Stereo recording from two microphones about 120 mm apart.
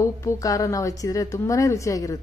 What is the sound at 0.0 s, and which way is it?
A woman's voice, 25° left (ahead or behind).